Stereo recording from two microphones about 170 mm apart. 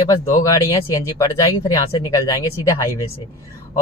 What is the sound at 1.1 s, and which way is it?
Speech, 20° left (ahead or behind).